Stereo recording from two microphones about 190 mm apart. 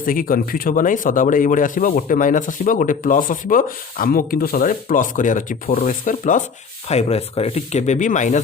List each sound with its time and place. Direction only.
0.0 s speech: 45° left (ahead or behind)